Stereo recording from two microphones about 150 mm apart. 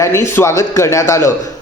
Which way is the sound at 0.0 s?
20° left (ahead or behind).